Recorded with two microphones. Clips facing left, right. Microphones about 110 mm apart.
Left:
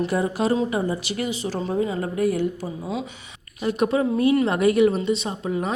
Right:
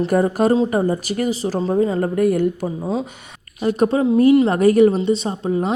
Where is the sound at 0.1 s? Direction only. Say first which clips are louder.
Right 6 dB; 45° right (ahead or behind).